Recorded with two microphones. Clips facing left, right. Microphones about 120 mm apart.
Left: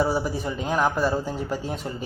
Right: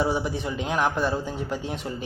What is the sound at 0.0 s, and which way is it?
Speech, centre (ahead or behind).